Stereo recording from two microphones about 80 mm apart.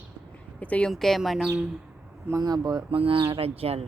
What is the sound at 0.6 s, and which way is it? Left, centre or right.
Speech, centre.